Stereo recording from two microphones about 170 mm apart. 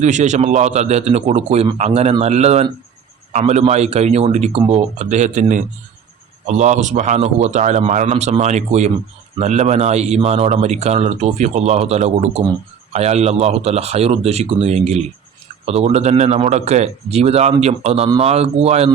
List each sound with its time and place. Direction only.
0.0 s a man's voice: 45° right (ahead or behind)